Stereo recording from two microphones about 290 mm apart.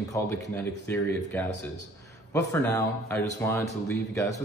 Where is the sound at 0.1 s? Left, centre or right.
Centre.